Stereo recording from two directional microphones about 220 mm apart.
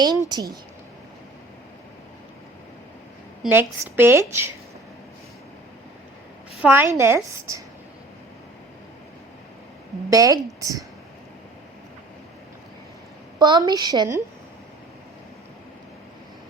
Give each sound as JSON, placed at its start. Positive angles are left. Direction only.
{"t": 0.3, "sound": "a woman's voice", "side_deg": -20}
{"t": 3.4, "sound": "a woman's voice", "side_deg": -10}
{"t": 6.6, "sound": "a woman's voice", "side_deg": -10}
{"t": 10.1, "sound": "a woman's voice", "side_deg": -15}
{"t": 13.4, "sound": "a woman's voice", "side_deg": -20}